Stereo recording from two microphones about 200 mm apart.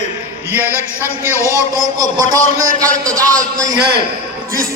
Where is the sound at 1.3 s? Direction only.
15° left (ahead or behind).